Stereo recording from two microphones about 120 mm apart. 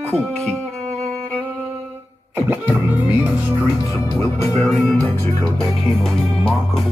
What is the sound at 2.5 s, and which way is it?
Speech, 15° right (ahead or behind).